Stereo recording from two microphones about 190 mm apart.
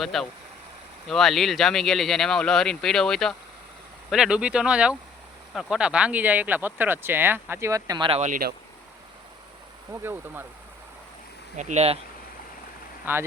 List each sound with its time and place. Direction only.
0.0 s speech: centre (ahead or behind); by 8.2 s 25° right (ahead or behind)
8.2 s speech: 50° right (ahead or behind)
9.9 s speech: 10° right (ahead or behind)
11.5 s speech: 40° right (ahead or behind)
13.1 s speech: 10° right (ahead or behind)